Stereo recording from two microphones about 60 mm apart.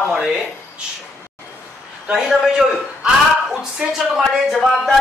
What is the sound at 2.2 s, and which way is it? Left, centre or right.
Music, centre.